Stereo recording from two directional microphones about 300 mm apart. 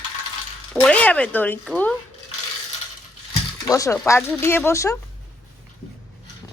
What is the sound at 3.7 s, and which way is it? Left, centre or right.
Speech, centre.